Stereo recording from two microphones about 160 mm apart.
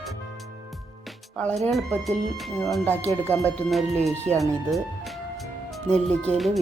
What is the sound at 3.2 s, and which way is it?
Speech, 10° left (ahead or behind).